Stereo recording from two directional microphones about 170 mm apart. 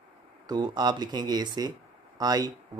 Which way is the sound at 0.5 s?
25° right (ahead or behind).